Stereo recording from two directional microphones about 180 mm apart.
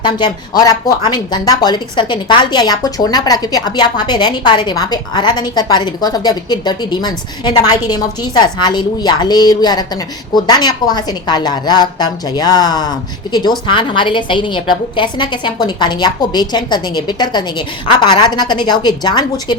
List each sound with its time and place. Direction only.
0.6 s a woman's voice: 20° left (ahead or behind)